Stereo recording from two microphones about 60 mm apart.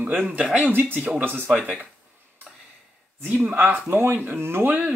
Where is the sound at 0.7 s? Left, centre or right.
Right.